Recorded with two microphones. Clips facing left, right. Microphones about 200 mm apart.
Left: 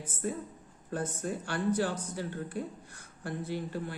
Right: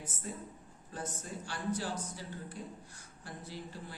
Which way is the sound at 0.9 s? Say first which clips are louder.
Left 8 dB; 60° left (ahead or behind).